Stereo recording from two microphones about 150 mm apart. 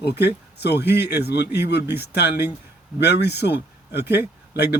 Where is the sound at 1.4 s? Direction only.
15° right (ahead or behind).